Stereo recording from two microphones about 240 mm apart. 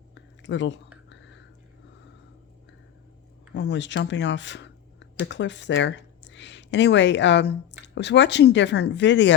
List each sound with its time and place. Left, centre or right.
0.1 s a sound: left
1.1 s whispering: left
3.5 s speech: left